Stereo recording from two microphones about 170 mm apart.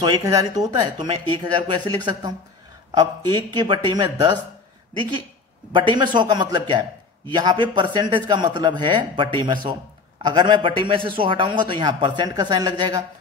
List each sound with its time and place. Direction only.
0.0 s a man's voice: 25° right (ahead or behind)
5.7 s a man's voice: 25° right (ahead or behind)